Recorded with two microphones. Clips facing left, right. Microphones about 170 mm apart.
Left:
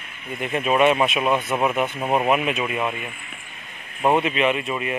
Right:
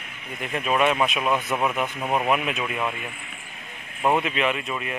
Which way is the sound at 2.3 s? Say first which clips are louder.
Left 3 dB; 5° left (ahead or behind).